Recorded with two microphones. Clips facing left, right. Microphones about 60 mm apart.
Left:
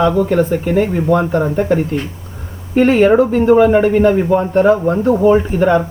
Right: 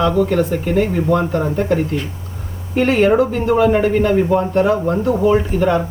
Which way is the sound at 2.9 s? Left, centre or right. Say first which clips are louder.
Left 2 dB; centre.